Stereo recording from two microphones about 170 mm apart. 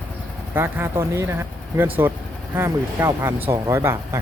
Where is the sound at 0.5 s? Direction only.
15° right (ahead or behind).